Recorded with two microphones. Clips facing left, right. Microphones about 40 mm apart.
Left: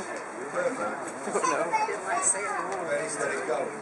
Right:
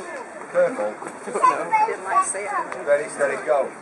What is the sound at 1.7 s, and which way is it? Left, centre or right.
Speech, centre.